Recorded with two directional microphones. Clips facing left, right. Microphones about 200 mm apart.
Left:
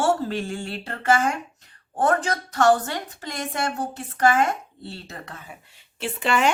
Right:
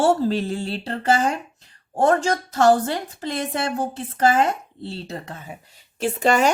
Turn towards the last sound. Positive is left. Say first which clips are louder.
# right 4 dB
turn(degrees=-40)  # may be behind; listen again after turning